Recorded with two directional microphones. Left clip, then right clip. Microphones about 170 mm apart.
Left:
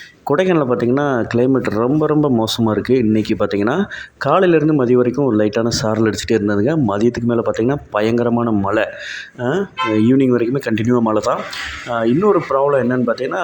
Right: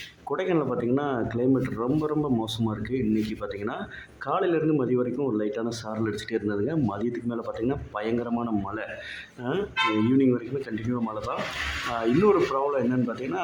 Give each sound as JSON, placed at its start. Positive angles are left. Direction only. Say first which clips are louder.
{"t": 0.3, "sound": "speech", "louder": "left 11 dB", "side_deg": 40}